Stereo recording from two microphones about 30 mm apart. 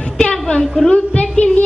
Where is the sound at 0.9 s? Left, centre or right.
Left.